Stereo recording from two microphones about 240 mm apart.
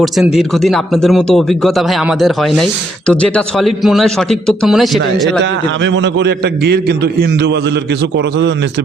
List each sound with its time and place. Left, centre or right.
0.0 s speech: centre
5.8 s a man's voice: right